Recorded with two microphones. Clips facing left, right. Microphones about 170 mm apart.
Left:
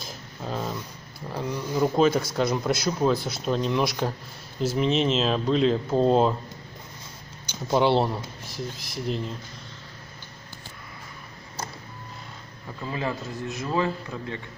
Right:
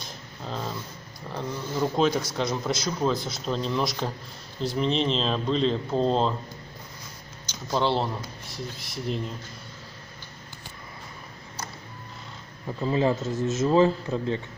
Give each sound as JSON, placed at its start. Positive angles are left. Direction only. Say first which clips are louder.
{"t": 0.0, "sound": "a sound", "louder": "left 2 dB", "side_deg": 5}
{"t": 1.3, "sound": "speech", "louder": "left 3 dB", "side_deg": 10}
{"t": 7.7, "sound": "speech", "louder": "left 4 dB", "side_deg": 15}
{"t": 8.5, "sound": "speech", "louder": "left 2 dB", "side_deg": 0}
{"t": 12.8, "sound": "speech", "louder": "right 6 dB", "side_deg": -25}